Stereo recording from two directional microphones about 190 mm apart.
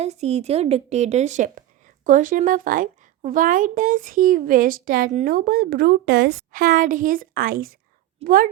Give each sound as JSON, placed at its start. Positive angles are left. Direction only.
{"t": 0.0, "sound": "a woman's voice", "side_deg": -35}